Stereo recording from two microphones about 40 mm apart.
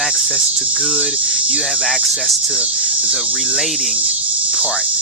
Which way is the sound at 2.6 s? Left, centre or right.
Right.